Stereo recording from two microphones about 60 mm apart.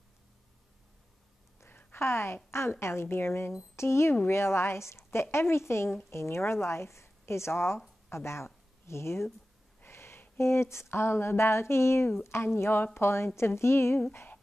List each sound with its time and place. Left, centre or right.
1.7 s a woman's voice: left
9.8 s a sound: left
10.4 s speech: left